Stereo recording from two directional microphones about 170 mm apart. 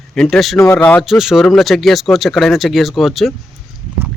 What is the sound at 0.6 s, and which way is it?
Speech, 10° left (ahead or behind).